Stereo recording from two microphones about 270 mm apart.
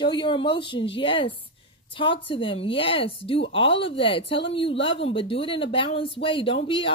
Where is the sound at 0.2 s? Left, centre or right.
Centre.